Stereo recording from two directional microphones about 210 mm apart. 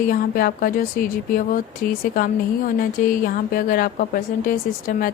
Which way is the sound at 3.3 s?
45° left (ahead or behind).